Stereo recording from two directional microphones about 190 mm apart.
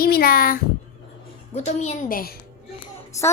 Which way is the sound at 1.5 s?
35° left (ahead or behind).